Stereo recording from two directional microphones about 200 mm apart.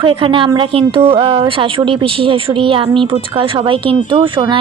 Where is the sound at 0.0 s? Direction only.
25° right (ahead or behind).